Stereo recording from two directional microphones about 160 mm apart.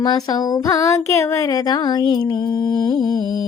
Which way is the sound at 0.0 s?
25° left (ahead or behind).